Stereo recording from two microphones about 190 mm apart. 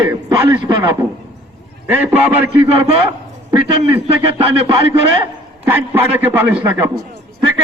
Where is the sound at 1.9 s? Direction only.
10° right (ahead or behind).